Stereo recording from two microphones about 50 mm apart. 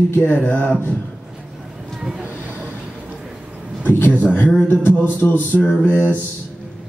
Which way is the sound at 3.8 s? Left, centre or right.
Left.